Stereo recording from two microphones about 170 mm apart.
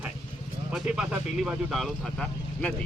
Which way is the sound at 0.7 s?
5° right (ahead or behind).